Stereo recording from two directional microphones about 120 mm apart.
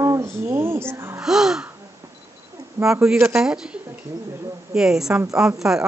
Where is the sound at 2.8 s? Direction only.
5° right (ahead or behind).